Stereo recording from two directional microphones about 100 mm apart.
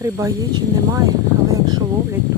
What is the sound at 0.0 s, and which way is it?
Speech, 30° right (ahead or behind).